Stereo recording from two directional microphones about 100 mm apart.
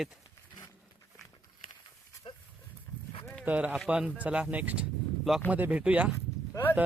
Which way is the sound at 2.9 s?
35° left (ahead or behind).